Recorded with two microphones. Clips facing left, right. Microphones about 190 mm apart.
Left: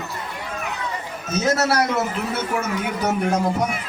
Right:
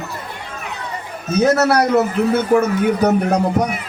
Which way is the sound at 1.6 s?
60° right (ahead or behind).